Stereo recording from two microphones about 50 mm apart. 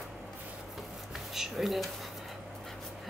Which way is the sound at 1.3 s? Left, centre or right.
Centre.